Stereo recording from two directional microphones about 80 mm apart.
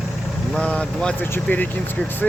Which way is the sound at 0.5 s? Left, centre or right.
Centre.